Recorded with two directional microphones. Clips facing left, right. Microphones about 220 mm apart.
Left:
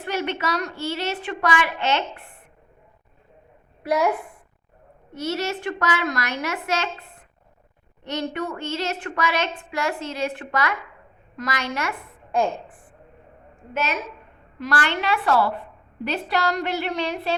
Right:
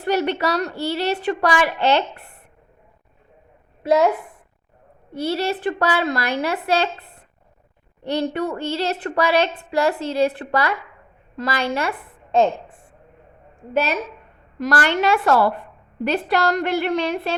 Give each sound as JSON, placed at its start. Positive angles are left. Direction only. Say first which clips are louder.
{"t": 0.0, "sound": "a woman's voice", "louder": "right 6 dB", "side_deg": -40}
{"t": 3.8, "sound": "a woman's voice", "louder": "right 5 dB", "side_deg": -20}
{"t": 5.1, "sound": "a woman's voice", "louder": "right 4 dB", "side_deg": -30}
{"t": 13.7, "sound": "a woman's voice", "louder": "right 5 dB", "side_deg": -35}